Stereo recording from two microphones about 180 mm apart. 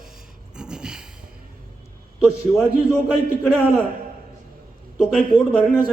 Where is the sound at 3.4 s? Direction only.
10° left (ahead or behind).